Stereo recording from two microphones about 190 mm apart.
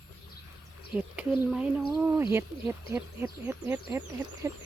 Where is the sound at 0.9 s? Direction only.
5° right (ahead or behind).